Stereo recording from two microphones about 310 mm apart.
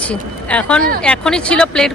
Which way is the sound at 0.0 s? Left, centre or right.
Centre.